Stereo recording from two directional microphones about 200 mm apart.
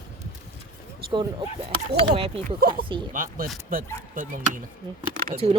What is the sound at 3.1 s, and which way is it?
Speech, 45° right (ahead or behind).